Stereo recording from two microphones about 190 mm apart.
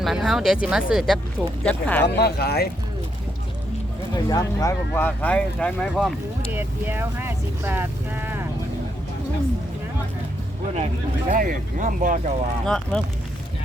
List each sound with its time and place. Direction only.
0.0 s speech: centre (ahead or behind)
2.0 s speech: 60° left (ahead or behind)
4.1 s speech: 20° left (ahead or behind); by 8.4 s 10° right (ahead or behind)
11.3 s speech: 45° right (ahead or behind)
12.6 s speech: 5° left (ahead or behind)